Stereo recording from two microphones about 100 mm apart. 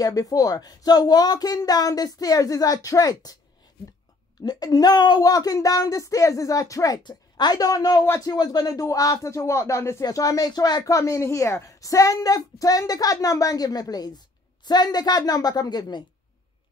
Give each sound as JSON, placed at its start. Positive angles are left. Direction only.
{"t": 0.0, "sound": "speech", "side_deg": 40}
{"t": 4.4, "sound": "speech", "side_deg": 40}
{"t": 7.0, "sound": "a woman's voice", "side_deg": 45}
{"t": 8.0, "sound": "speech", "side_deg": 25}
{"t": 8.4, "sound": "speech", "side_deg": 40}